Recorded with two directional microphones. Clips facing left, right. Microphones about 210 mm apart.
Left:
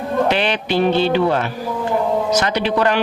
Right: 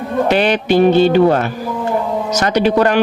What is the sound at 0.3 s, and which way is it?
Speech, 45° right (ahead or behind).